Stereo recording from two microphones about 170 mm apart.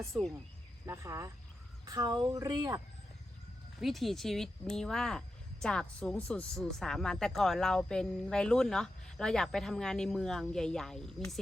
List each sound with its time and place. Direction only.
0.1 s speech: centre (ahead or behind)
0.9 s speech: 20° right (ahead or behind)
3.8 s speech: centre (ahead or behind)